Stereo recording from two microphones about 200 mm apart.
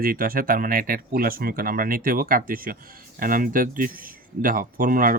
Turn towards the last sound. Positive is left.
turn(degrees=-45)  # may be behind; listen again after turning